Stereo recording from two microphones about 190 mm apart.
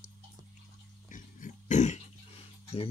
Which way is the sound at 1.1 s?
40° left (ahead or behind).